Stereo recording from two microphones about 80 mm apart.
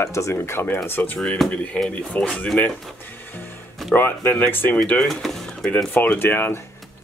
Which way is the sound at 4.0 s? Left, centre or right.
Left.